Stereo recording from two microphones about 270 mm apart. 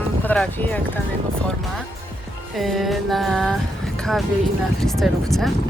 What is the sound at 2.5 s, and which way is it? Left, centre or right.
Speech, centre.